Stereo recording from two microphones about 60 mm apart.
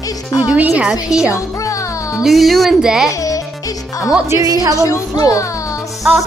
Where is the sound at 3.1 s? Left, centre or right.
Left.